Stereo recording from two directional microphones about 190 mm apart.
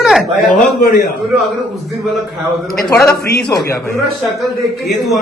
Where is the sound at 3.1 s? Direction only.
60° left (ahead or behind).